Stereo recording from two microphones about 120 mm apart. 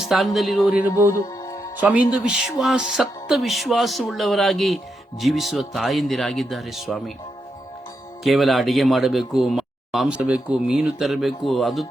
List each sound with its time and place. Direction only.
0.0 s speech: centre (ahead or behind)
0.7 s music: 15° right (ahead or behind)
1.1 s music: 25° left (ahead or behind)
1.8 s speech: 10° right (ahead or behind)
8.2 s speech: centre (ahead or behind)